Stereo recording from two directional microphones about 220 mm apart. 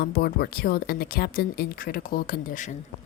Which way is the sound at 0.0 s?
45° left (ahead or behind).